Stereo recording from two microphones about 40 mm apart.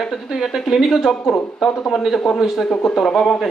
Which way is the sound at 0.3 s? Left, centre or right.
Centre.